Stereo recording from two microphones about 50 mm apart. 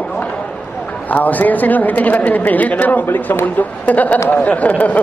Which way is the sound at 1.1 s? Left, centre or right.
Left.